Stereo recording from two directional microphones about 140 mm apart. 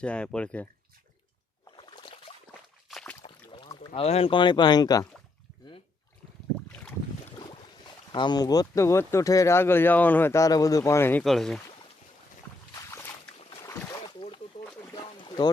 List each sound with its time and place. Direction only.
0.0 s speech: 10° left (ahead or behind)
1.7 s a sound: 35° left (ahead or behind)
2.9 s rowboat: 5° left (ahead or behind)
3.9 s speech: 45° left (ahead or behind); by 5.0 s 30° left (ahead or behind)
8.1 s speech: 30° left (ahead or behind)
11.2 s speech: 5° left (ahead or behind)
12.7 s a sound: 20° left (ahead or behind)
13.6 s boat: 20° left (ahead or behind)
14.1 s a sound: 40° left (ahead or behind)